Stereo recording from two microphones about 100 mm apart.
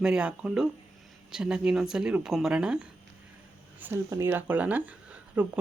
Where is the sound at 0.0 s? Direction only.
10° right (ahead or behind).